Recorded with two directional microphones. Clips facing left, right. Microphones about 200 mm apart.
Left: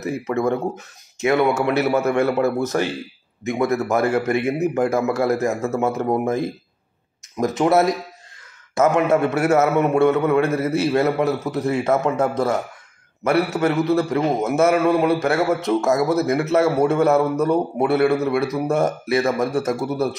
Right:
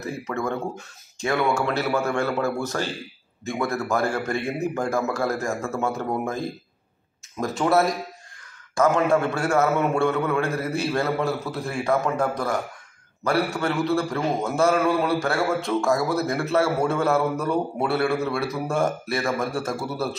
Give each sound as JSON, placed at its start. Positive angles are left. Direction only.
{"t": 0.0, "sound": "a man's voice", "side_deg": 20}
{"t": 7.3, "sound": "a man's voice", "side_deg": 20}